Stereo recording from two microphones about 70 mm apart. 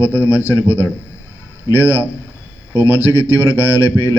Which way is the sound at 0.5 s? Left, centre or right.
Right.